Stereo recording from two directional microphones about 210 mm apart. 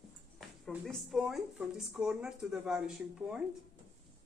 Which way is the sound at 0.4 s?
Centre (ahead or behind).